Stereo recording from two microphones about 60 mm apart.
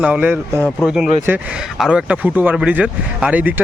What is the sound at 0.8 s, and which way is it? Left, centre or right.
Speech, centre.